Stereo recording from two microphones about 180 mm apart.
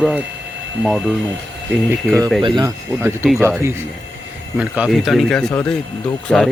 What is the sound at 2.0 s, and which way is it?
Speech, 5° left (ahead or behind).